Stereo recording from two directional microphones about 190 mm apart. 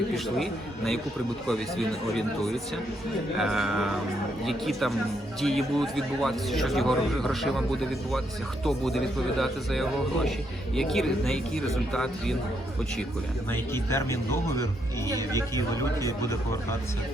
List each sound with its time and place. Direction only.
1.5 s speech: centre (ahead or behind)
13.5 s speech: 15° left (ahead or behind)
15.1 s speech: 20° right (ahead or behind)
15.5 s speech: 15° left (ahead or behind)